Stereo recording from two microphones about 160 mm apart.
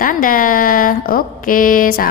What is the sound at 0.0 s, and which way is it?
A woman's voice, 60° left (ahead or behind).